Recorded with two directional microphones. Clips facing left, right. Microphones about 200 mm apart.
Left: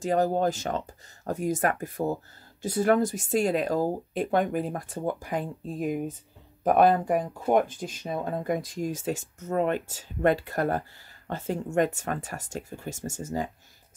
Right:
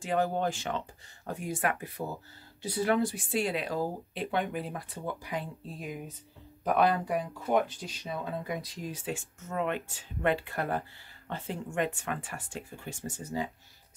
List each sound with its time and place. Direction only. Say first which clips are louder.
0.0 s speech: left 5 dB; 40° left (ahead or behind)